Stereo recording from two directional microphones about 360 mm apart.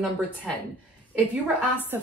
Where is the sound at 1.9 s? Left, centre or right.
Centre.